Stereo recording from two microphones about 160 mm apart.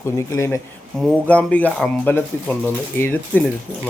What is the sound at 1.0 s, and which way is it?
A man's voice, 5° left (ahead or behind).